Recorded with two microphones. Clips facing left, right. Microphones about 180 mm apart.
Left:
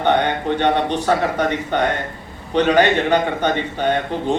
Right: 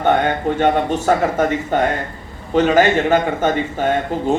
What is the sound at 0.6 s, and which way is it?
A man's voice, 45° right (ahead or behind).